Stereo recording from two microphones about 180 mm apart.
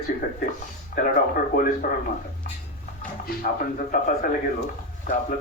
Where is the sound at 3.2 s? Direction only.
50° left (ahead or behind).